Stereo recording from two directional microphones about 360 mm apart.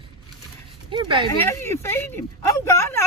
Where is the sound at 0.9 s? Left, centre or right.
Centre.